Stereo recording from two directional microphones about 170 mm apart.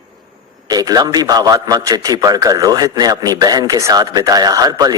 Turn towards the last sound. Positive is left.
turn(degrees=-20)  # may be behind; listen again after turning